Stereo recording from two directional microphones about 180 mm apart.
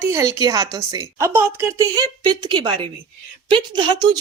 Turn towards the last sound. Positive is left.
turn(degrees=-25)  # may be behind; listen again after turning